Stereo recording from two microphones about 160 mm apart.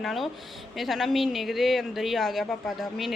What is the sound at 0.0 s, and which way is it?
A woman's voice, centre (ahead or behind).